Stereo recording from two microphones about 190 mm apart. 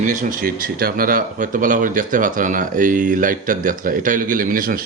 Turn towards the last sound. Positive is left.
turn(degrees=-45)  # may be behind; listen again after turning